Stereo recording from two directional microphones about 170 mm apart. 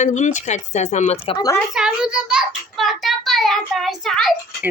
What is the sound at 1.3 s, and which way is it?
Speech, 20° left (ahead or behind).